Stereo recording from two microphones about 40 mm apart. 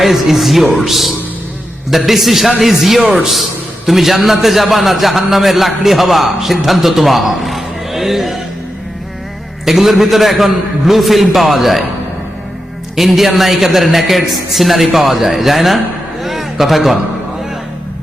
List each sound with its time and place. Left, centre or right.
0.0 s a man's voice: centre
9.6 s a man's voice: centre
13.0 s a man's voice: centre
16.2 s a sound: centre